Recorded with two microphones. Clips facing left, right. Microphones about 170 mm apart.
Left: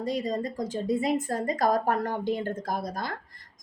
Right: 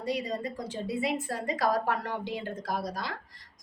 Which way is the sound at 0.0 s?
45° left (ahead or behind).